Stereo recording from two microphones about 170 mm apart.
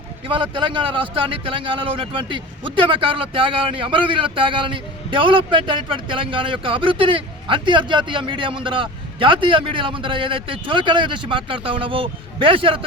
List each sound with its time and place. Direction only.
0.3 s speech: 30° right (ahead or behind)